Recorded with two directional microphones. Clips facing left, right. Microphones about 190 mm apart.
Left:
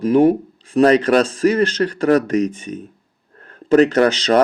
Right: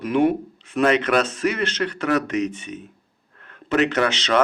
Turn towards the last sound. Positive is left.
turn(degrees=35)  # may be behind; listen again after turning